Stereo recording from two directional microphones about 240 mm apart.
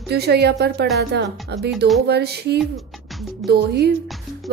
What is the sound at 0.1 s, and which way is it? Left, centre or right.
Speech, right.